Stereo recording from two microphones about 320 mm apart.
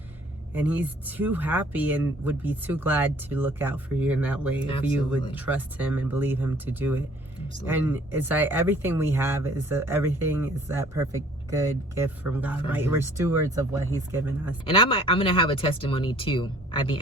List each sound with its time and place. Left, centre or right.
0.5 s speech: centre
14.6 s speech: centre